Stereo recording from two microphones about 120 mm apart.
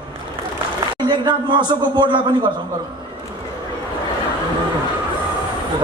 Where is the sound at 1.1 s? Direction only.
40° right (ahead or behind).